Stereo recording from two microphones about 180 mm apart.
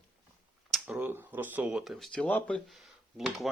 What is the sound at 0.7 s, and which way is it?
Speech, 10° right (ahead or behind).